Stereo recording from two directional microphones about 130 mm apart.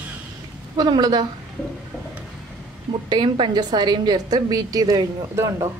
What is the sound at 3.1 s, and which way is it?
A woman's voice, 35° right (ahead or behind).